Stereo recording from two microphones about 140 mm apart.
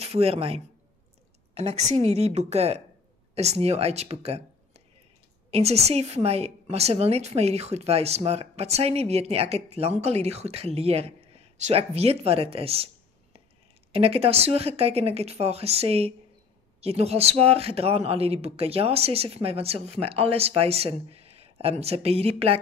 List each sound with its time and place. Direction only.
0.0 s a woman's voice: 45° right (ahead or behind)